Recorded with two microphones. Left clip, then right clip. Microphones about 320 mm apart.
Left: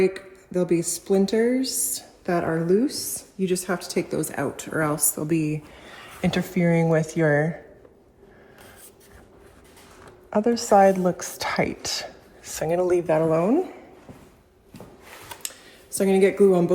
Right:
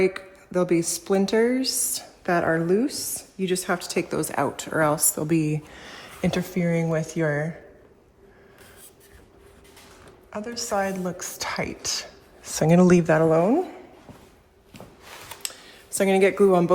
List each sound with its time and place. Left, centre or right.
0.0 s speech: centre
2.8 s a woman's voice: centre; by 5.8 s right
6.2 s speech: centre
10.2 s a woman's voice: centre
12.9 s speech: right
15.3 s computer keyboard: centre